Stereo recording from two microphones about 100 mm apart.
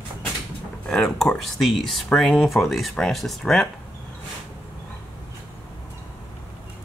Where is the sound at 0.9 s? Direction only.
5° left (ahead or behind).